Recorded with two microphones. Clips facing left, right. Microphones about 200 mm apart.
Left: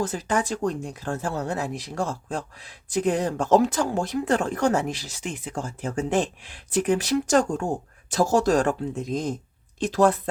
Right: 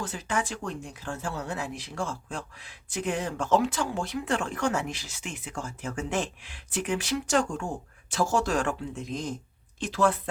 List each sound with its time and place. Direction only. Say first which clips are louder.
0.0 s speech: left 6 dB; 40° left (ahead or behind)